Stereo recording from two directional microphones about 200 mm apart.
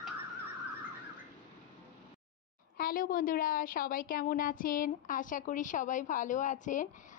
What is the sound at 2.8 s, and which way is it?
A woman's voice, 45° left (ahead or behind).